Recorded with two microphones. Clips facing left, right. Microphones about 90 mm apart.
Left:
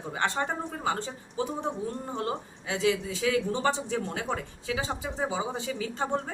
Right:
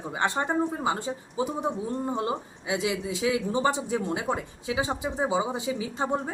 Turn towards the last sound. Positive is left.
turn(degrees=-15)  # may be behind; listen again after turning